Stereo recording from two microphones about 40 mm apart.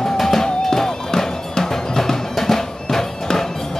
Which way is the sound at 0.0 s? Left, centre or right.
Centre.